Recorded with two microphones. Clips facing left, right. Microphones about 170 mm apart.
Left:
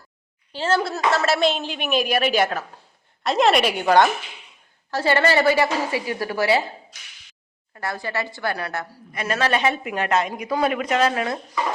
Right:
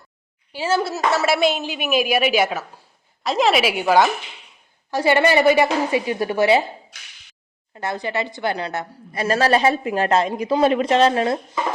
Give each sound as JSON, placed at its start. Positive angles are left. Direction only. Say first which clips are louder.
{"t": 0.5, "sound": "a woman's voice", "louder": "right 1 dB", "side_deg": -10}
{"t": 4.9, "sound": "a woman's voice", "louder": "right 3 dB", "side_deg": -15}
{"t": 7.7, "sound": "a woman's voice", "louder": "right 3 dB", "side_deg": -20}
{"t": 9.1, "sound": "a woman's voice", "louder": "right 5 dB", "side_deg": -35}